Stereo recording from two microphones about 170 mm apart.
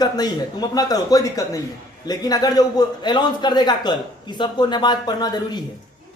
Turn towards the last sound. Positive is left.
turn(degrees=25)  # may be behind; listen again after turning